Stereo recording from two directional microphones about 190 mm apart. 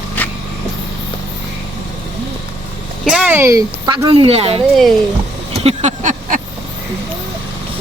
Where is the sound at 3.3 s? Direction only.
15° right (ahead or behind); by 4.6 s 30° right (ahead or behind).